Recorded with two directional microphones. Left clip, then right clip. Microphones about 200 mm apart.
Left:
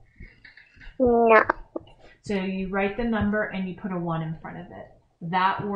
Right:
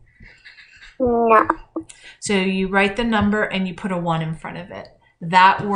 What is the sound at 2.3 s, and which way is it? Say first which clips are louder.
Speech: right 9 dB; 15° right (ahead or behind).